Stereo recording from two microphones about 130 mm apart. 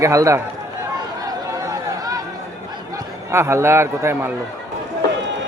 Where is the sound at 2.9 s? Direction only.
25° right (ahead or behind).